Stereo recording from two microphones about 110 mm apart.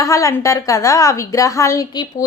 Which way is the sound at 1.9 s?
40° left (ahead or behind).